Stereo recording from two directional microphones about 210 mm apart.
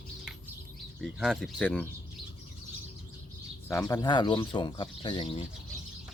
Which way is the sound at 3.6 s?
15° left (ahead or behind).